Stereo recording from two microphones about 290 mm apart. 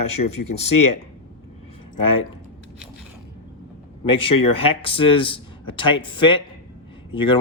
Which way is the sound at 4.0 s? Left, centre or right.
Centre.